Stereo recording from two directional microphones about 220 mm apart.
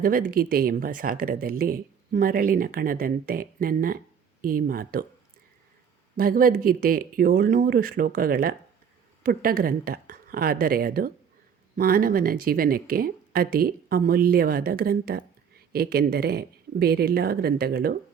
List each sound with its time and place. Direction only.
0.0 s speech: 40° right (ahead or behind)
6.1 s speech: 40° right (ahead or behind)